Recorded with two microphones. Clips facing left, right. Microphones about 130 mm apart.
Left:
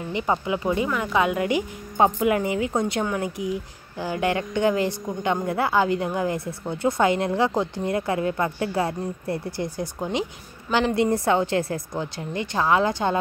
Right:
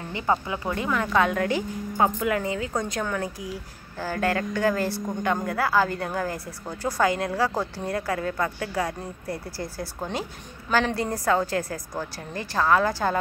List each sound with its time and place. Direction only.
0.1 s speech: 15° left (ahead or behind)
2.0 s speech: 20° left (ahead or behind)
11.0 s speech: 25° left (ahead or behind)